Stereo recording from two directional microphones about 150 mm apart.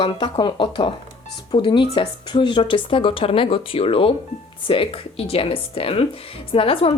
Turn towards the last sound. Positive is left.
turn(degrees=40)  # may be behind; listen again after turning